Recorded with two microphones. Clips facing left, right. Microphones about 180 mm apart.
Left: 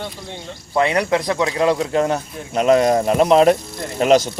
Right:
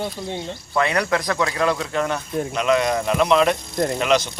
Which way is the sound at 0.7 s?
30° left (ahead or behind).